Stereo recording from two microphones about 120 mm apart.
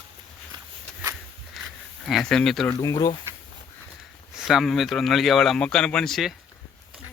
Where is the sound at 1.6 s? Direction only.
Centre (ahead or behind).